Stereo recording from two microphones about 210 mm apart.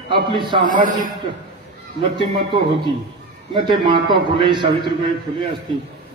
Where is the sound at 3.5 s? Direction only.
25° right (ahead or behind).